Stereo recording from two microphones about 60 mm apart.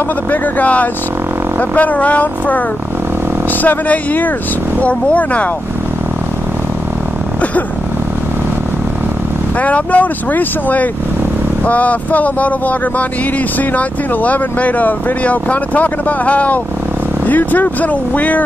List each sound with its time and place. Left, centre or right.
0.3 s speech: left
3.6 s speech: left
9.6 s speech: left